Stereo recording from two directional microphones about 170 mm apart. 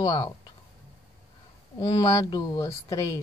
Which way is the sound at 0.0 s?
20° left (ahead or behind).